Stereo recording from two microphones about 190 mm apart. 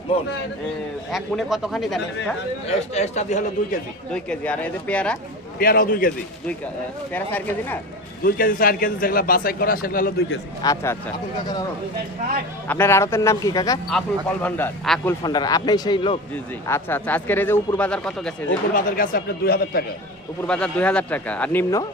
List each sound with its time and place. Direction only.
1.1 s a man's voice: centre (ahead or behind)
2.6 s a man's voice: 35° left (ahead or behind)
4.1 s a man's voice: 5° left (ahead or behind)
5.5 s a man's voice: 50° left (ahead or behind)
7.1 s a man's voice: 10° left (ahead or behind)
8.2 s a man's voice: 50° left (ahead or behind)
10.6 s speech: 20° left (ahead or behind)
12.6 s a man's voice: 10° left (ahead or behind)
14.4 s a man's voice: 5° left (ahead or behind)
15.2 s a man's voice: 20° left (ahead or behind); by 18.3 s 5° left (ahead or behind)
18.7 s a man's voice: 50° left (ahead or behind)
20.5 s a man's voice: 5° left (ahead or behind)